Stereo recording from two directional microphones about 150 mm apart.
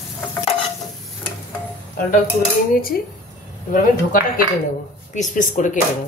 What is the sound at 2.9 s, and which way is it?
Speech, 90° left.